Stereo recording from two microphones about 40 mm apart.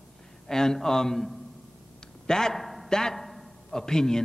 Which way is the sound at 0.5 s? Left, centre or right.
Centre.